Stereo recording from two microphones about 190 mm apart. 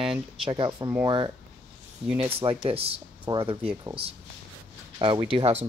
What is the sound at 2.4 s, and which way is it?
Speech, 30° right (ahead or behind).